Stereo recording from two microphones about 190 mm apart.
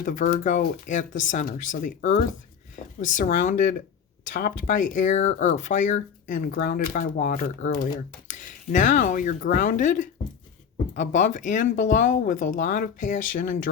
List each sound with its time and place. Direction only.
0.0 s speech: 45° left (ahead or behind)